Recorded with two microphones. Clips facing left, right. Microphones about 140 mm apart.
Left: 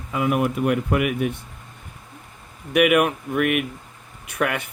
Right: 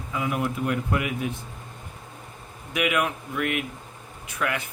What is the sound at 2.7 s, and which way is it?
Speech, 65° left (ahead or behind).